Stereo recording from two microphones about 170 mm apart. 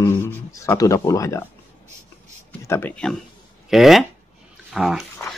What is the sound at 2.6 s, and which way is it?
Speech, 15° left (ahead or behind).